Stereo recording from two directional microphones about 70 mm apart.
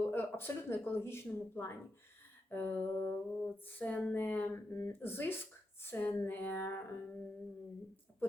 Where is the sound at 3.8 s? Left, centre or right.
Centre.